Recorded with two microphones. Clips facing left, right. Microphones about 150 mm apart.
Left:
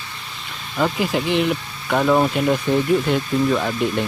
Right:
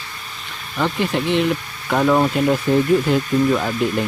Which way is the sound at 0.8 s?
5° left (ahead or behind).